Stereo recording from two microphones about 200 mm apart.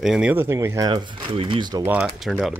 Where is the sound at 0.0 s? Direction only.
5° right (ahead or behind); by 1.9 s 25° right (ahead or behind).